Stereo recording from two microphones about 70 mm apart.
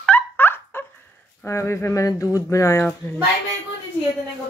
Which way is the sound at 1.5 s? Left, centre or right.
Left.